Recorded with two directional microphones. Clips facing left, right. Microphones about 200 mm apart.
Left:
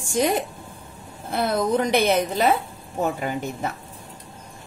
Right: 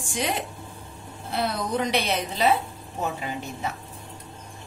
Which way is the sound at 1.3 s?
50° left (ahead or behind).